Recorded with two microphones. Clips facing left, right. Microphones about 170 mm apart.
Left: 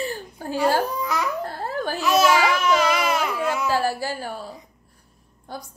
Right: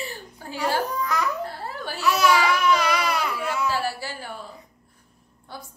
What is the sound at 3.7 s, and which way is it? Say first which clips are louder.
A woman's voice: left 5 dB; 45° left (ahead or behind).